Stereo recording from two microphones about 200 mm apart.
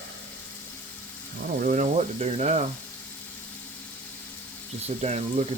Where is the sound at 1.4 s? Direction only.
45° right (ahead or behind).